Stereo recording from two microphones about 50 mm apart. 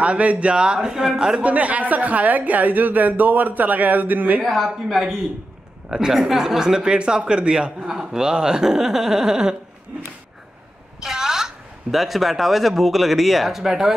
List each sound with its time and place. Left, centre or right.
0.0 s speech: right
1.4 s speech: right
4.4 s speech: centre
4.6 s speech: centre
11.0 s a woman's voice: centre